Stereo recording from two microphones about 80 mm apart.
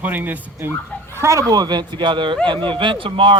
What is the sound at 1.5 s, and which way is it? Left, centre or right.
Speech, right.